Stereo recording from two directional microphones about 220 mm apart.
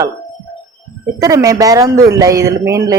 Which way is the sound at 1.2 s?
15° right (ahead or behind).